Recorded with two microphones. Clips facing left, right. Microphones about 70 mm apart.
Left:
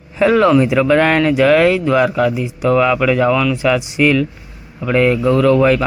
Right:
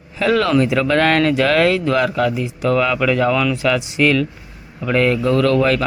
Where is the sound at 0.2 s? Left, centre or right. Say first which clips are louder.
Left 4 dB; centre.